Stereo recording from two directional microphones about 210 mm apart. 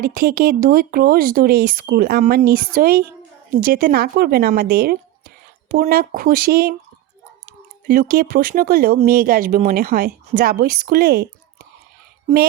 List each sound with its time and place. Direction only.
0.0 s speech: 45° right (ahead or behind)
7.9 s speech: 40° right (ahead or behind)